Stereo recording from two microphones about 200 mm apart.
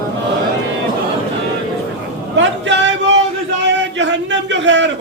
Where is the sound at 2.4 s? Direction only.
65° right (ahead or behind).